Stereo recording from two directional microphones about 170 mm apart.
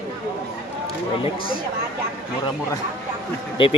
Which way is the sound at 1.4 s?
60° left (ahead or behind).